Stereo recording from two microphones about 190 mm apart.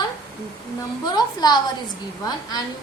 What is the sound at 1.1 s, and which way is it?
Speech, 20° left (ahead or behind).